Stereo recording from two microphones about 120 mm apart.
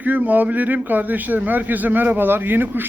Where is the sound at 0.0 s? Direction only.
15° right (ahead or behind).